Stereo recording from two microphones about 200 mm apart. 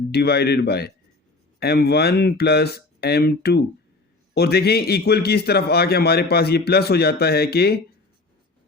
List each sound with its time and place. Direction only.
0.1 s a man's voice: 55° left (ahead or behind)